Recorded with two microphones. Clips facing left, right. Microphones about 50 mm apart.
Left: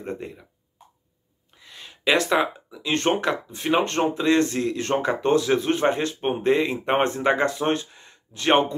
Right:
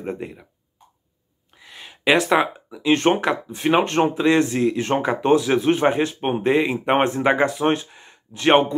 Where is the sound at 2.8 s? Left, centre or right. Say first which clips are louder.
Right 4 dB; right.